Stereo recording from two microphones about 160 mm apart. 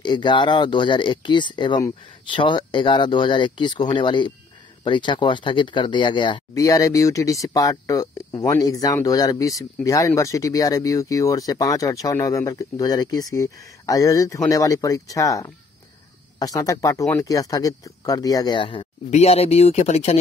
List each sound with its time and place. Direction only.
0.0 s speech: 30° left (ahead or behind)
19.0 s speech: 40° left (ahead or behind)